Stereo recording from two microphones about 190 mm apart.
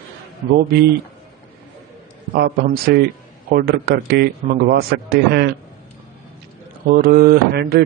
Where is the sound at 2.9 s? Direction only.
60° right (ahead or behind).